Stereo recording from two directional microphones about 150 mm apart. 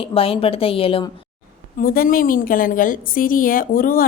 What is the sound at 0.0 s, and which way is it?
A woman's voice, 40° left (ahead or behind).